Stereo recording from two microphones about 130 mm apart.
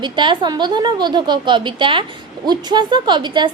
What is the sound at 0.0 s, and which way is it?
A woman's voice, 35° right (ahead or behind).